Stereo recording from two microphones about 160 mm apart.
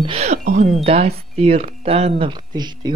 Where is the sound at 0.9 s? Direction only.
40° right (ahead or behind).